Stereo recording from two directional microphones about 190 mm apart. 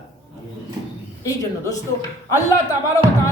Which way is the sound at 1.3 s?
20° left (ahead or behind).